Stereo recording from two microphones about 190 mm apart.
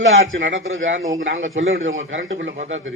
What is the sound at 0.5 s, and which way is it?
A man's voice, 90° right.